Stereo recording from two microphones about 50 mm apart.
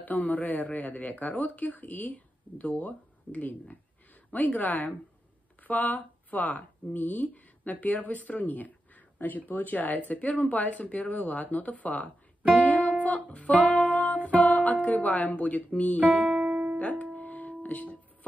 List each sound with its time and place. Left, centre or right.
0.0 s speech: left
12.5 s music: left
16.0 s music: right
17.0 s music: left